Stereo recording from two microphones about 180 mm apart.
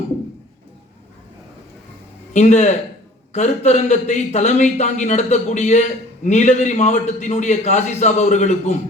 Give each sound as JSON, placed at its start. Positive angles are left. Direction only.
{"t": 2.3, "sound": "a man's voice", "side_deg": 40}